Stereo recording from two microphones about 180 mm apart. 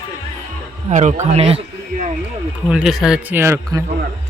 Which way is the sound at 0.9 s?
40° right (ahead or behind).